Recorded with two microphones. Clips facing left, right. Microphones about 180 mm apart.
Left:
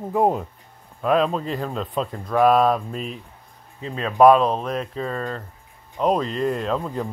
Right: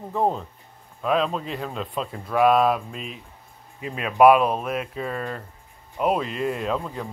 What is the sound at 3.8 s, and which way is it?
Speech, 10° right (ahead or behind).